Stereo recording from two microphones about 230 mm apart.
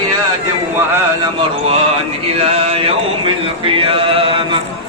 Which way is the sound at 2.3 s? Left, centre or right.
Right.